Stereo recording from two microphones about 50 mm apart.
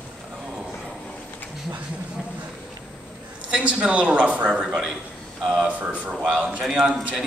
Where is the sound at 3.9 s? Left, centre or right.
Right.